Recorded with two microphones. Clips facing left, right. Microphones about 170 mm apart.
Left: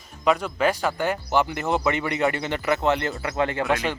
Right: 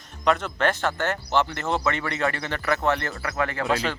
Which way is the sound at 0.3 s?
10° left (ahead or behind).